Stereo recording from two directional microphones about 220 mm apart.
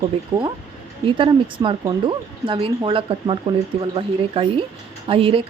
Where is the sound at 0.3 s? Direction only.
20° right (ahead or behind).